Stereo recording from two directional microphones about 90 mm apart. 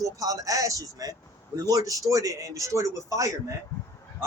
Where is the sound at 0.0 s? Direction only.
40° right (ahead or behind).